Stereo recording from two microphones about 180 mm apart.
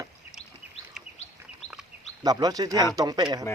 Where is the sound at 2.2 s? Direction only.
20° right (ahead or behind).